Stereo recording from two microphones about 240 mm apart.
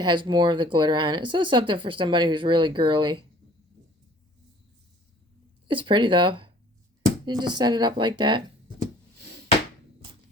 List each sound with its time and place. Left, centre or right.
0.0 s speech: centre
5.6 s speech: right